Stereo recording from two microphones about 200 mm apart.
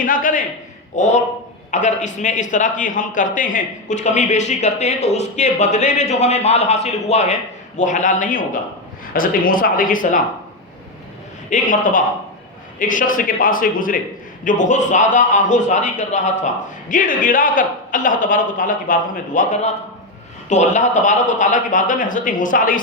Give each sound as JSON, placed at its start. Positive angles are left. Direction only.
{"t": 0.0, "sound": "a man's voice", "side_deg": 45}
{"t": 11.4, "sound": "a man's voice", "side_deg": 40}